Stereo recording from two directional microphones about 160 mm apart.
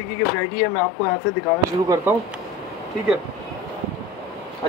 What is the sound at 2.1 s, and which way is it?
Speech, 10° right (ahead or behind).